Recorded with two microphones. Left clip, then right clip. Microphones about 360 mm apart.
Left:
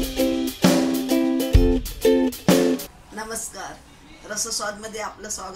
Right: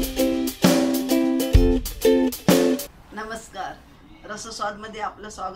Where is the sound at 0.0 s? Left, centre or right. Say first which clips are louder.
Even; centre.